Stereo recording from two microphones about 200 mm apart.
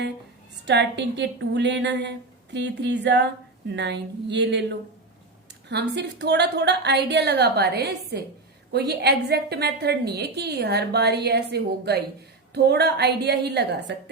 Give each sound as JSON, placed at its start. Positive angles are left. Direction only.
{"t": 0.6, "sound": "a woman's voice", "side_deg": -60}